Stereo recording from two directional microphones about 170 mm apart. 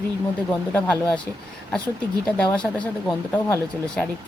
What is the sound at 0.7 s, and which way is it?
Speech, 10° left (ahead or behind).